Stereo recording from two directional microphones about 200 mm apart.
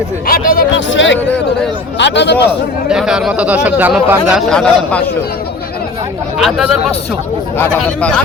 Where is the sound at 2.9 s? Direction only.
Centre (ahead or behind).